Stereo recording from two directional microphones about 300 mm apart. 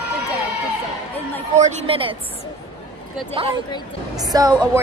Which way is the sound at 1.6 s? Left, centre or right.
Centre.